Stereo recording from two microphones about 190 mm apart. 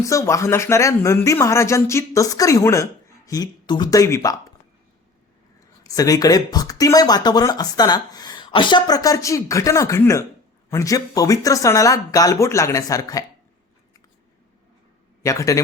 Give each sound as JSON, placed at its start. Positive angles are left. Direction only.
{"t": 0.0, "sound": "speech", "side_deg": 15}
{"t": 5.8, "sound": "speech", "side_deg": 20}
{"t": 15.2, "sound": "a man's voice", "side_deg": 15}